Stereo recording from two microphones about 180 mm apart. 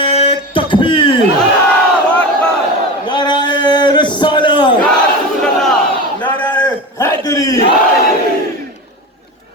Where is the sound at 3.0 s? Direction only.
25° left (ahead or behind).